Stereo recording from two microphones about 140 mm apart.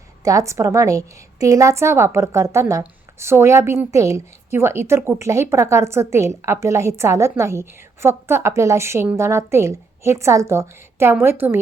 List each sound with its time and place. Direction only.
0.3 s a woman's voice: 20° right (ahead or behind)